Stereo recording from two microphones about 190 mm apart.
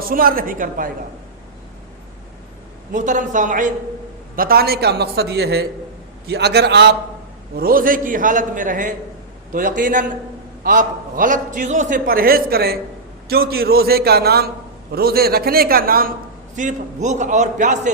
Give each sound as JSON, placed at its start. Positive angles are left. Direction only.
{"t": 0.1, "sound": "a man's voice", "side_deg": -50}
{"t": 2.9, "sound": "a man's voice", "side_deg": -40}
{"t": 4.4, "sound": "speech", "side_deg": -55}
{"t": 7.5, "sound": "a man's voice", "side_deg": -50}